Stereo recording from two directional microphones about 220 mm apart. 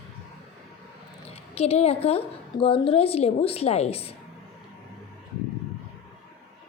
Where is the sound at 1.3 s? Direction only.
30° left (ahead or behind).